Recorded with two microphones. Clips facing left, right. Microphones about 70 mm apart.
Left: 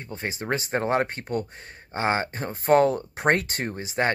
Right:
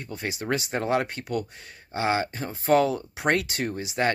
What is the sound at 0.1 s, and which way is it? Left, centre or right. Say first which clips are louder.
Speech: even; left.